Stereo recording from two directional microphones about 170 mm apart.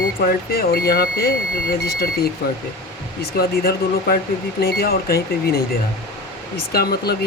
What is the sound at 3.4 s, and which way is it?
Speech, 65° left (ahead or behind).